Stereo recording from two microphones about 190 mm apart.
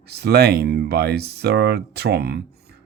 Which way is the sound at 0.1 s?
55° right (ahead or behind).